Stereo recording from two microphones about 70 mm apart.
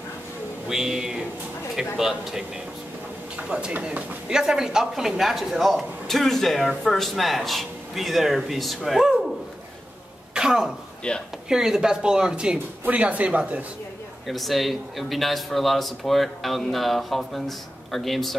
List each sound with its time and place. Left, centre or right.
0.7 s a man's voice: centre
3.4 s speech: centre
3.7 s speech: right
4.3 s a man's voice: centre
10.3 s throat clearing: centre
11.0 s speech: centre
11.4 s speech: centre
14.2 s a man's voice: centre